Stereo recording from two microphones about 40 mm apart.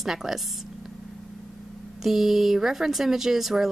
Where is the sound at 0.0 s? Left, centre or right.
Centre.